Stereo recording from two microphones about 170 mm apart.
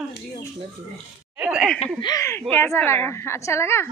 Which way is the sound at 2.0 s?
20° left (ahead or behind).